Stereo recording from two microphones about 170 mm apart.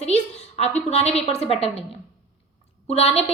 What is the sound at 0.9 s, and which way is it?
Speech, 40° left (ahead or behind).